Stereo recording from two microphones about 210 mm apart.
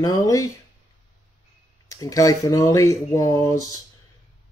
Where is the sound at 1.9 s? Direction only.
15° left (ahead or behind).